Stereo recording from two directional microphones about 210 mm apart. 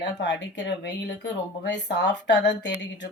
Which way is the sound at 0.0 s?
55° left (ahead or behind).